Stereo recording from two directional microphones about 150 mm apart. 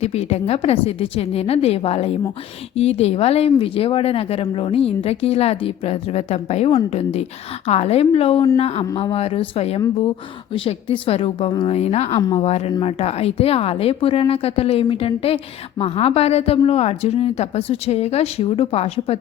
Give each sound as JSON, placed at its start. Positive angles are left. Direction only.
{"t": 0.0, "sound": "a woman's voice", "side_deg": 45}